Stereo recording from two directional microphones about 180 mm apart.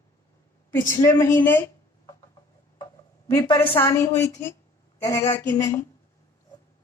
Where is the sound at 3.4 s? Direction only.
15° left (ahead or behind).